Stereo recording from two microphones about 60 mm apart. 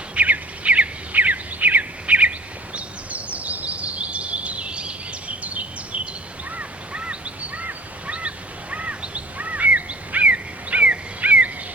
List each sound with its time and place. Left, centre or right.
0.1 s bird: right
2.7 s a sound: right
8.7 s bird: right